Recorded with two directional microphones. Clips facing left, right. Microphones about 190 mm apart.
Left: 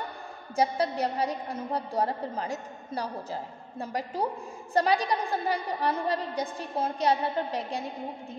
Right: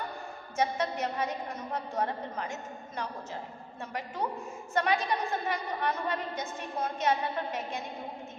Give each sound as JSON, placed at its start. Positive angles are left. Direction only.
{"t": 0.6, "sound": "a woman's voice", "side_deg": 35}